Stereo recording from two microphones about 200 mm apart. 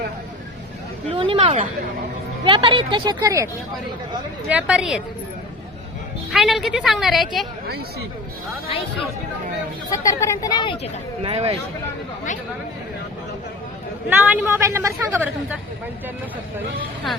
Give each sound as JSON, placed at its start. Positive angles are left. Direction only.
{"t": 1.1, "sound": "a woman's voice", "side_deg": -25}
{"t": 6.3, "sound": "a woman's voice", "side_deg": 0}
{"t": 9.9, "sound": "speech", "side_deg": 15}
{"t": 11.2, "sound": "speech", "side_deg": -30}
{"t": 14.2, "sound": "a woman's voice", "side_deg": -10}